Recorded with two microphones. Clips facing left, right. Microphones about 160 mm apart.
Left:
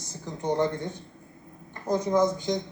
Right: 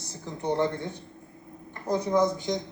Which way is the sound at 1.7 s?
20° left (ahead or behind).